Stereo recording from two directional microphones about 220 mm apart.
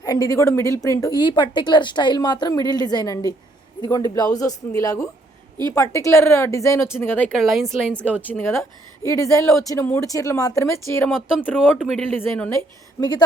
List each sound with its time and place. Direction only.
0.0 s a man's voice: 15° left (ahead or behind)
11.8 s speech: centre (ahead or behind)
13.0 s speech: 15° left (ahead or behind)